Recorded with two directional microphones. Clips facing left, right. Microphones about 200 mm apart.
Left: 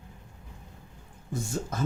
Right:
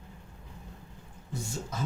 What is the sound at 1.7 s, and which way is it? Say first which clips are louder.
Speech: left 5 dB; 50° left (ahead or behind).